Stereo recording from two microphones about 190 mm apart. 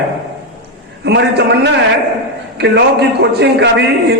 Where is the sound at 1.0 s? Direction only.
65° right (ahead or behind).